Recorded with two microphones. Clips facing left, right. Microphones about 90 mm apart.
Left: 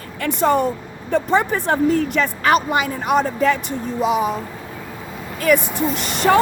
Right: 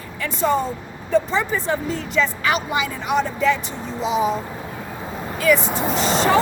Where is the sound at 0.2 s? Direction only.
60° left (ahead or behind).